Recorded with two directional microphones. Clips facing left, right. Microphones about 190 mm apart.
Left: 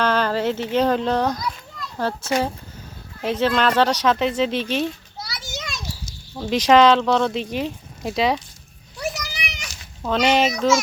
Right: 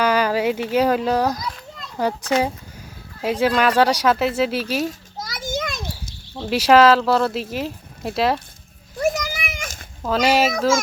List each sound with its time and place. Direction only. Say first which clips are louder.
0.0 s speech: right 2 dB; 10° right (ahead or behind)
1.8 s children playing: right 2 dB; 15° right (ahead or behind)
3.2 s speech: right 1 dB; 10° right (ahead or behind)
5.1 s children playing: right 7 dB; 45° right (ahead or behind)
6.3 s speech: right 1 dB; 5° right (ahead or behind)
9.0 s a sound: right 7 dB; 50° right (ahead or behind)
10.0 s speech: right 1 dB; 5° right (ahead or behind)